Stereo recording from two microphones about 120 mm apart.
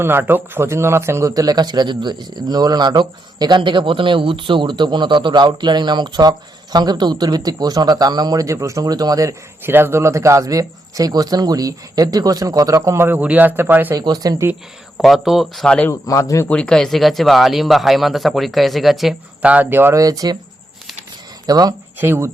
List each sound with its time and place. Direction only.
0.0 s speech: 20° right (ahead or behind)
14.0 s speech: 35° right (ahead or behind)
14.9 s speech: centre (ahead or behind)
15.9 s a man's voice: 30° left (ahead or behind)
16.5 s speech: 5° left (ahead or behind); by 20.3 s 30° right (ahead or behind)
21.4 s speech: 30° right (ahead or behind)
21.9 s speech: 20° right (ahead or behind)